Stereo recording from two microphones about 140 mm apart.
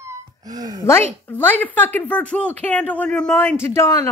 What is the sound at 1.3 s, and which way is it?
A woman's voice, 15° left (ahead or behind).